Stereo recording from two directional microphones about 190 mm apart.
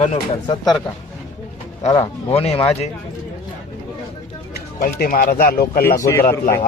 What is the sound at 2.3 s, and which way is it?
Speech, 30° left (ahead or behind).